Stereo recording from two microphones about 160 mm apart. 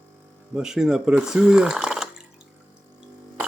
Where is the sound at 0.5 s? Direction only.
5° right (ahead or behind).